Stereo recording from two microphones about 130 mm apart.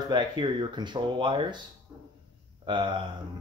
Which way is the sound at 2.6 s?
40° right (ahead or behind).